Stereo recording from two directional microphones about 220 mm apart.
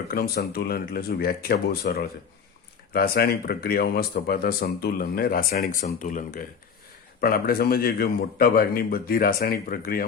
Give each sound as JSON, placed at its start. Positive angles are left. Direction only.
{"t": 0.1, "sound": "speech", "side_deg": 45}